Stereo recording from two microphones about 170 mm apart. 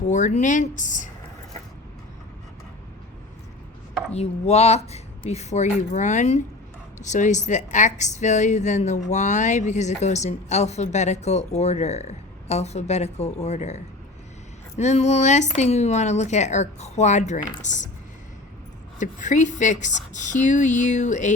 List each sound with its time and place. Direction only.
0.1 s speech: 45° left (ahead or behind)
4.1 s a woman's voice: 40° left (ahead or behind)
18.9 s speech: 45° left (ahead or behind)